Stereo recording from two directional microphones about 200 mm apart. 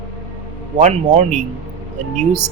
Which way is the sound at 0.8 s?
35° right (ahead or behind).